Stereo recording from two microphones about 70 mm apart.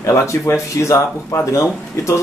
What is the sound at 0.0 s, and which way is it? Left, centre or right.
Speech, left.